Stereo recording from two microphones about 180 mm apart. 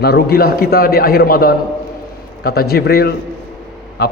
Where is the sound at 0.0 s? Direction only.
60° left (ahead or behind).